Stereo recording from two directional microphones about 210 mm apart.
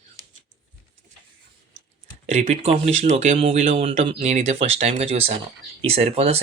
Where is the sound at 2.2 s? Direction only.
30° right (ahead or behind).